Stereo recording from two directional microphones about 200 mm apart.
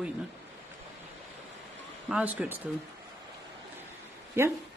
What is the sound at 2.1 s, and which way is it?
Speech, 5° right (ahead or behind).